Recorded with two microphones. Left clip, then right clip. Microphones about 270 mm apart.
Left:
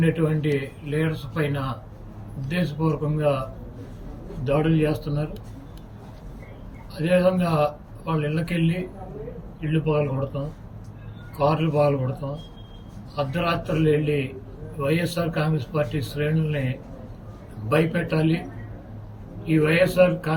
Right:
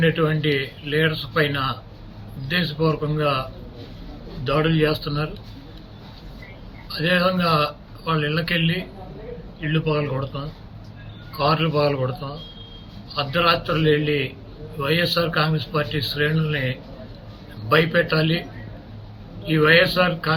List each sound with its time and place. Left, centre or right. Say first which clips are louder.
0.0 s speech: right 4 dB; centre
4.4 s speech: right 2 dB; centre
6.9 s speech: even; centre
19.5 s speech: right 4 dB; centre